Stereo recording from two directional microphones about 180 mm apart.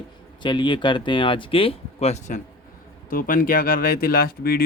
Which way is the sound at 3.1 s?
50° left (ahead or behind).